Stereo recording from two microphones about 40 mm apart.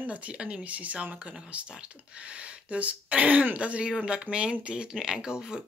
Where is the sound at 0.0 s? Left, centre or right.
Right.